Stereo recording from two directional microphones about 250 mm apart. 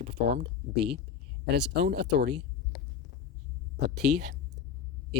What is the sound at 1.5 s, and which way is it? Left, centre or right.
Speech, right.